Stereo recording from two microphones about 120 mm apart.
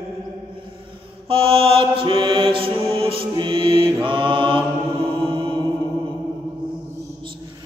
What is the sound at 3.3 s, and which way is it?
Music, 45° right (ahead or behind).